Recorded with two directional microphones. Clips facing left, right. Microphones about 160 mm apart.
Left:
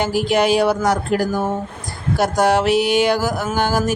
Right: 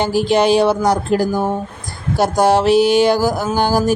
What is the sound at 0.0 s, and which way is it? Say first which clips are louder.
Speech: right 3 dB; 30° right (ahead or behind).